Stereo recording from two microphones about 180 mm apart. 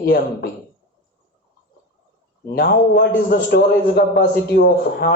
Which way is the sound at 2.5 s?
60° left (ahead or behind).